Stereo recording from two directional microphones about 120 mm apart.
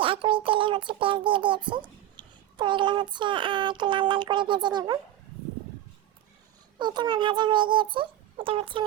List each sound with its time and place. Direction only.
0.0 s a child's voice: 45° right (ahead or behind)
6.7 s a child's voice: 40° right (ahead or behind)